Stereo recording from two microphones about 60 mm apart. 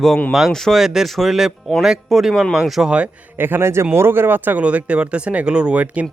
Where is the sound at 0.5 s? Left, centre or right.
Centre.